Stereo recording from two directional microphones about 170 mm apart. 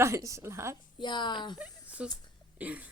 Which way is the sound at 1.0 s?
25° left (ahead or behind).